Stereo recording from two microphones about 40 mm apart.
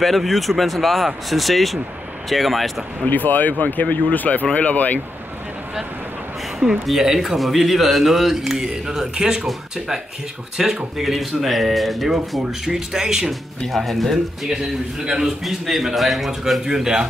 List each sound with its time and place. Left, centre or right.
0.0 s speech: centre
3.1 s speech: left
6.9 s speech: centre
10.6 s speech: centre
11.0 s speech: centre
13.7 s speech: centre